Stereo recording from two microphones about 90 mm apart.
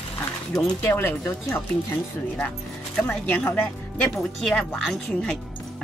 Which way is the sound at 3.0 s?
15° left (ahead or behind).